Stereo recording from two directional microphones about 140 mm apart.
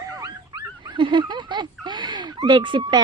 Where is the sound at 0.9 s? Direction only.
35° right (ahead or behind).